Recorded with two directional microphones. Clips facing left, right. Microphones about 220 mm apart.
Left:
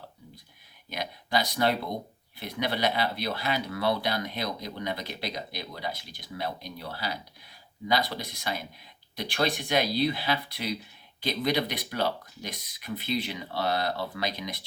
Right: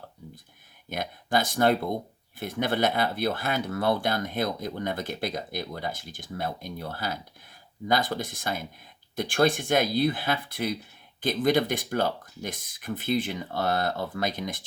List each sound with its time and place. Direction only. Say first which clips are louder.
0.9 s speech: right 3 dB; 50° right (ahead or behind)